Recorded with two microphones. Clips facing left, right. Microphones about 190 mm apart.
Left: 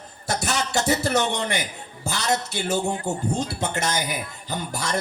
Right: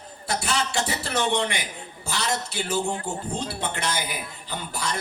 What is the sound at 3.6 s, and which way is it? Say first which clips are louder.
Speech: left 3 dB; 45° left (ahead or behind).